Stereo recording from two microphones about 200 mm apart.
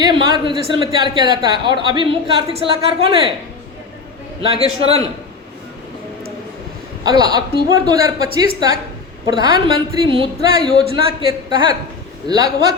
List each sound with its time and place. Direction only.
0.0 s a man's voice: 20° right (ahead or behind)
4.4 s a man's voice: 30° right (ahead or behind)
7.0 s a woman's voice: 20° right (ahead or behind)
12.3 s a man's voice: 20° right (ahead or behind)